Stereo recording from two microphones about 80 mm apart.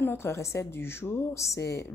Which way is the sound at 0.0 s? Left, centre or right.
Left.